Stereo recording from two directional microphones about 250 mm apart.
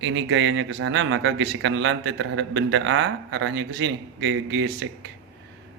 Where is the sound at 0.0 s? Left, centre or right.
Right.